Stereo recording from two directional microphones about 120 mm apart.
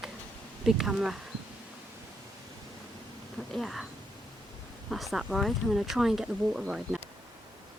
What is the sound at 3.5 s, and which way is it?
Speech, centre (ahead or behind).